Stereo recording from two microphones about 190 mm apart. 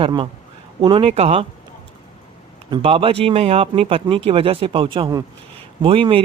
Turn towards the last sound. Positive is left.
turn(degrees=-30)  # may be behind; listen again after turning